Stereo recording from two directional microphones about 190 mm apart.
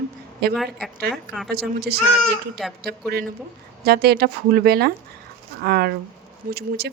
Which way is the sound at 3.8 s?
55° right (ahead or behind).